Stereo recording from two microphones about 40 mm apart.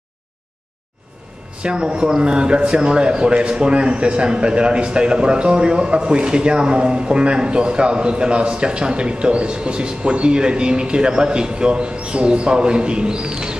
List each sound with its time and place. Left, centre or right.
1.6 s a man's voice: right